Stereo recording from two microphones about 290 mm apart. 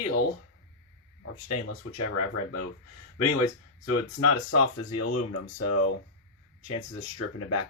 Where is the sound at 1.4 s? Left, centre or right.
Left.